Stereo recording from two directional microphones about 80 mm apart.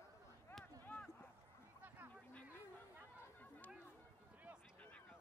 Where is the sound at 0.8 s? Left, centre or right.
Left.